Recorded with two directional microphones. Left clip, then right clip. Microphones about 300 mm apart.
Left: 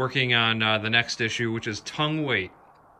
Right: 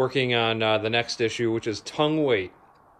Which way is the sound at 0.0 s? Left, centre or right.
Centre.